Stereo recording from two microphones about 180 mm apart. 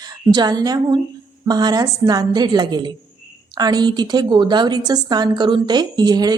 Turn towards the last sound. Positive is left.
turn(degrees=-25)  # may be behind; listen again after turning